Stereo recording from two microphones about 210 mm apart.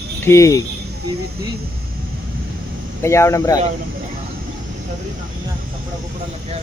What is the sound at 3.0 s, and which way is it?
Speech, 15° left (ahead or behind).